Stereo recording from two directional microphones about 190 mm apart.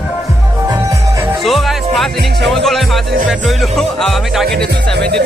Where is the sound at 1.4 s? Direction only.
Centre (ahead or behind).